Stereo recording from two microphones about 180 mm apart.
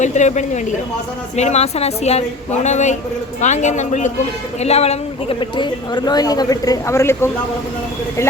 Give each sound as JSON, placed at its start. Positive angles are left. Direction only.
{"t": 0.0, "sound": "a woman's voice", "side_deg": 40}